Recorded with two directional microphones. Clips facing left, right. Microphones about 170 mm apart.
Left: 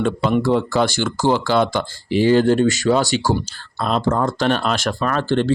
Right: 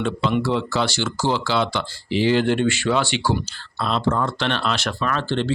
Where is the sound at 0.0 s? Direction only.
50° left (ahead or behind).